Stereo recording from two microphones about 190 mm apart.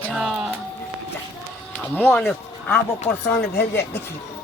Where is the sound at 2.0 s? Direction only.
10° left (ahead or behind).